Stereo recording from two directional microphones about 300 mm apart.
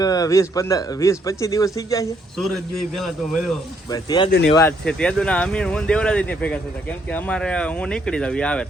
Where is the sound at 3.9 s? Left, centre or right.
Centre.